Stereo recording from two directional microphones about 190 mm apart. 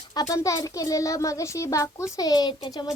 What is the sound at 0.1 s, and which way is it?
A child's voice, 20° left (ahead or behind).